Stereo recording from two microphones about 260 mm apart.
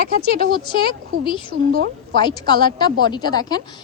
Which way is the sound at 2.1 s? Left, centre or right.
Centre.